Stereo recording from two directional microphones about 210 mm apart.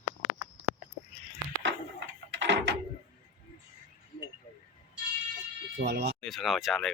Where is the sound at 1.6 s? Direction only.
60° right (ahead or behind).